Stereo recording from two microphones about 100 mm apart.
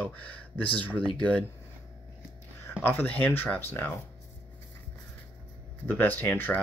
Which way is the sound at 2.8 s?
20° left (ahead or behind).